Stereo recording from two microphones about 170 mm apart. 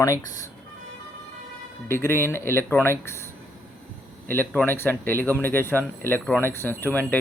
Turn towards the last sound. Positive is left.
turn(degrees=10)  # may be behind; listen again after turning